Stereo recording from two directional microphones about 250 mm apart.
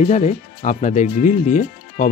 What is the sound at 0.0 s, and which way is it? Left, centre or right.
Speech, left.